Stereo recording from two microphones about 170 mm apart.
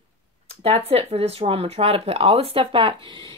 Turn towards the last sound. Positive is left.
turn(degrees=-30)  # may be behind; listen again after turning